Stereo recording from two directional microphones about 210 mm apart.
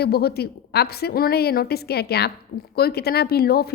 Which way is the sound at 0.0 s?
50° left (ahead or behind).